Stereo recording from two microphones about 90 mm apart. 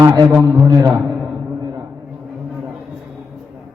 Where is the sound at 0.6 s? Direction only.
35° right (ahead or behind).